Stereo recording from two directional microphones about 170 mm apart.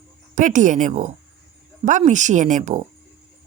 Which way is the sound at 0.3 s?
45° right (ahead or behind).